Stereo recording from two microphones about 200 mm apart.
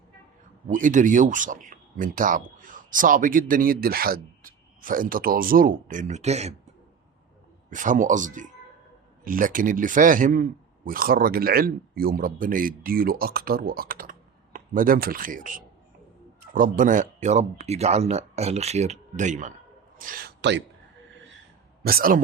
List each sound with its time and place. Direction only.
0.7 s speech: 40° right (ahead or behind)
7.7 s speech: 40° right (ahead or behind); by 20.7 s 60° right (ahead or behind)
21.8 s speech: 45° right (ahead or behind)